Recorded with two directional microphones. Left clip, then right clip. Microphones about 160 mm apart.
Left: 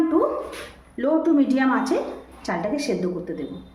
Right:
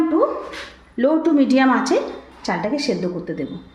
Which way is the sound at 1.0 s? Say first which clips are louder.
Right 3 dB; 60° right (ahead or behind).